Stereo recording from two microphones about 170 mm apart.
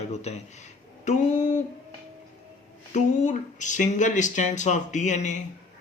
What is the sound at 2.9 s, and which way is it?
Speech, 45° left (ahead or behind).